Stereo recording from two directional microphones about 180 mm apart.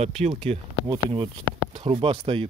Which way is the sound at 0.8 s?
25° right (ahead or behind).